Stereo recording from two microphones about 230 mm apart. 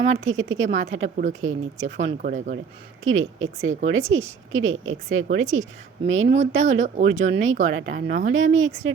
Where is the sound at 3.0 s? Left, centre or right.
Right.